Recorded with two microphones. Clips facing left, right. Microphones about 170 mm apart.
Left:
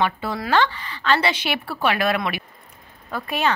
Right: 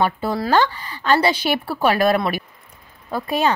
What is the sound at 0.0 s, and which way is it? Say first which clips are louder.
A woman's voice: right 3 dB; 40° right (ahead or behind).